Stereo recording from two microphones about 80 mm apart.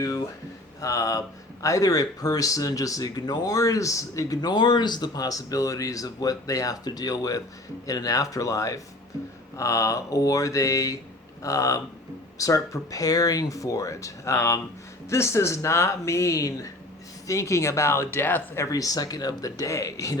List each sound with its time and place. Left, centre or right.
0.0 s speech: left
18.7 s speech: left